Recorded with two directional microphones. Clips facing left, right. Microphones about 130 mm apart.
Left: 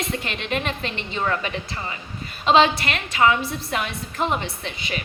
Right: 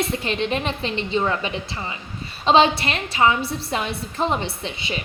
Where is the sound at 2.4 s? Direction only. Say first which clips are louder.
Right 1 dB; 30° right (ahead or behind).